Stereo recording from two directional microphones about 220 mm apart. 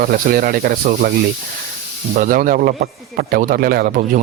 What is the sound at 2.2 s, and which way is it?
Speech, 40° right (ahead or behind).